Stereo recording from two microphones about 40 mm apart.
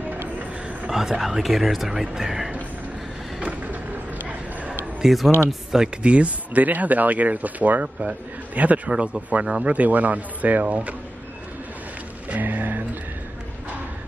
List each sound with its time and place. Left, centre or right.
0.8 s speech: centre
3.6 s a sound: right
5.0 s speech: centre
6.0 s speech: right
12.3 s music: right